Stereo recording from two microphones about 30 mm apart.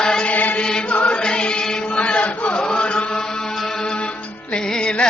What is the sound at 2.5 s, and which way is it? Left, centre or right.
Chant, left.